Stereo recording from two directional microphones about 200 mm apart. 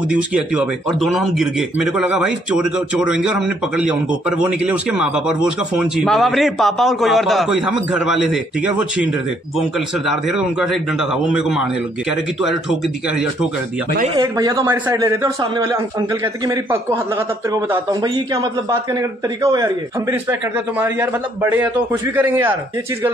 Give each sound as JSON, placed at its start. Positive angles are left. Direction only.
{"t": 0.1, "sound": "speech", "side_deg": -5}
{"t": 14.1, "sound": "speech", "side_deg": -15}